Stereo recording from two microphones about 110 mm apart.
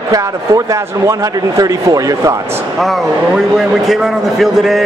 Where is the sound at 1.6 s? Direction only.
30° right (ahead or behind).